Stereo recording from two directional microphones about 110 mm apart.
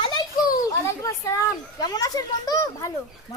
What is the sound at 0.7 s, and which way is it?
A child's voice, 30° left (ahead or behind).